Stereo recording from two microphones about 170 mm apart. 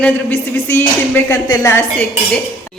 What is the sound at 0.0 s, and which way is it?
Speech, 10° left (ahead or behind).